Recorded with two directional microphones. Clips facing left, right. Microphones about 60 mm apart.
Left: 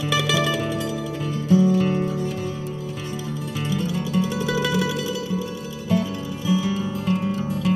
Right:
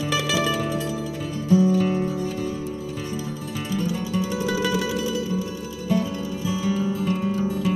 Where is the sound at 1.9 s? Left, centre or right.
Left.